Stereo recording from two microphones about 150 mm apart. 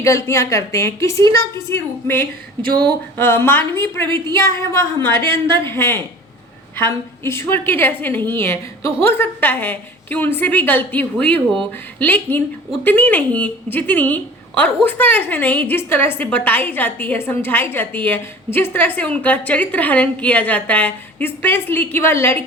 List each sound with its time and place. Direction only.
0.0 s a woman's voice: 20° left (ahead or behind)